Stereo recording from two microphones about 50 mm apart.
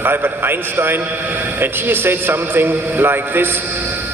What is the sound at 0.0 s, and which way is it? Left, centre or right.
A man's voice, right.